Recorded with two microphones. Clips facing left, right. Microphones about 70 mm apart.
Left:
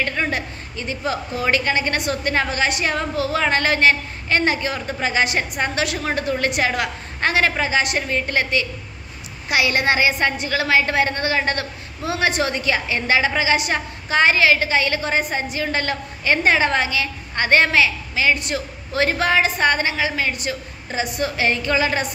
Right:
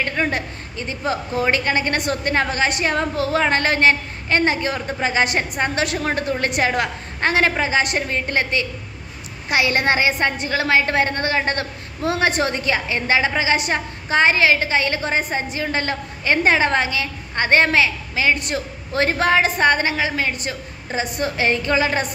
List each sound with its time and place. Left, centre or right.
0.3 s a woman's voice: right
12.0 s a woman's voice: right